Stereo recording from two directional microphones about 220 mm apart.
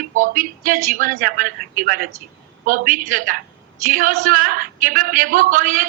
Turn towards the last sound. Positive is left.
turn(degrees=-40)  # may be behind; listen again after turning